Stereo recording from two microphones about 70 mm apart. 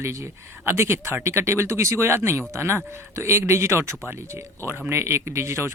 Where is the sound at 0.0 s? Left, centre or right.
Right.